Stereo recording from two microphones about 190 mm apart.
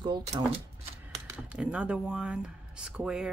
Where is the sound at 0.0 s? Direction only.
25° right (ahead or behind).